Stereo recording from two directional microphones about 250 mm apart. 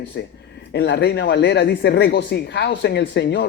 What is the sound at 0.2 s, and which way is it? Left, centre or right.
Speech, left.